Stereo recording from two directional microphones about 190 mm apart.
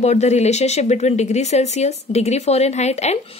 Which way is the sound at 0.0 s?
35° left (ahead or behind).